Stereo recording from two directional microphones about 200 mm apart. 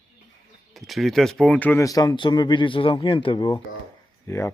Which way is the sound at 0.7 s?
Centre (ahead or behind).